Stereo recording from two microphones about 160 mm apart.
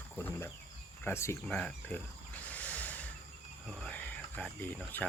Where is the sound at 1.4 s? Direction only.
5° left (ahead or behind).